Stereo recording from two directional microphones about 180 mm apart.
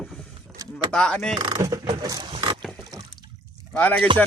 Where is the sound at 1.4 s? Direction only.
20° right (ahead or behind).